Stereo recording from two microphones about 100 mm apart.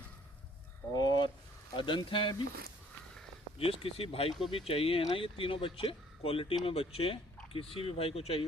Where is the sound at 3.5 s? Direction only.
70° left (ahead or behind).